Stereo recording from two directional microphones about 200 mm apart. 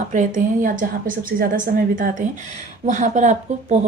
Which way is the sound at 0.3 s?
40° right (ahead or behind).